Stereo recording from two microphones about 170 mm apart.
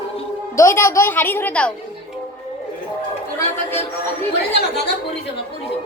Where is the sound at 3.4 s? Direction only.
15° left (ahead or behind).